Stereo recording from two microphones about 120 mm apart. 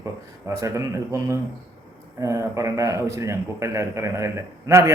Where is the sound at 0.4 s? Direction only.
25° right (ahead or behind).